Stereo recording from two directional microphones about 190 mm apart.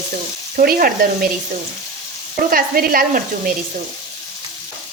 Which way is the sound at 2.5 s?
50° right (ahead or behind).